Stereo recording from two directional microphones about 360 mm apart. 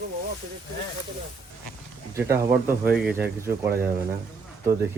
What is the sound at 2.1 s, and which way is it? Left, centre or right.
Speech, centre.